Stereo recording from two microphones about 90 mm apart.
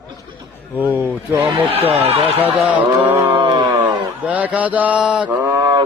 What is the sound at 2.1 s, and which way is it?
Speech, 90° right.